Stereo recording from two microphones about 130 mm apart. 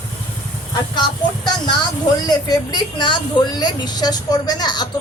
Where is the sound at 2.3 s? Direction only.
35° left (ahead or behind).